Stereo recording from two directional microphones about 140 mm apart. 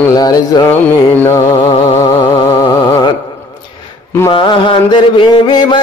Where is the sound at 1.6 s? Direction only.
50° left (ahead or behind).